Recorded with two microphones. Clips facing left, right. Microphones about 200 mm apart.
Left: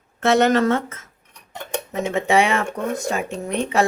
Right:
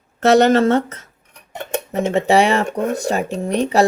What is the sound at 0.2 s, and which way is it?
Speech, 35° right (ahead or behind).